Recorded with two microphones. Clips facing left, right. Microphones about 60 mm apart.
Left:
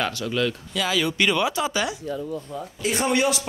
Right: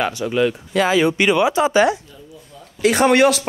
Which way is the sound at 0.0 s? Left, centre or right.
Right.